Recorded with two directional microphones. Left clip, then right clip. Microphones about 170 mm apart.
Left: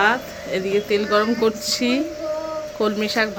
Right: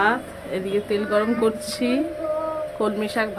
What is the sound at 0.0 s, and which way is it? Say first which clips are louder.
A woman's voice: left 2 dB; centre (ahead or behind).